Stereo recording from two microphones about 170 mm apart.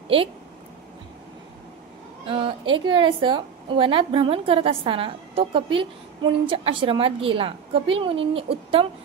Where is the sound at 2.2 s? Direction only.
30° right (ahead or behind).